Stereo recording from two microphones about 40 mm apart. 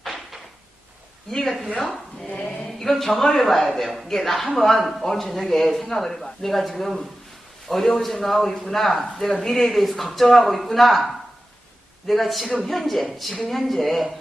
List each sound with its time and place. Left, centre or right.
0.0 s a sound: centre
1.5 s a man's voice: centre
2.9 s a man's voice: centre